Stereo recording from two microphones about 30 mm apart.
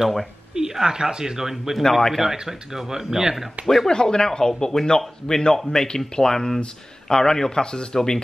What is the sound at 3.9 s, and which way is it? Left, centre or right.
Speech, left.